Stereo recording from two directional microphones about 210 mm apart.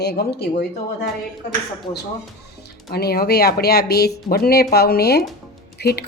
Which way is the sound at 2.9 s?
50° left (ahead or behind).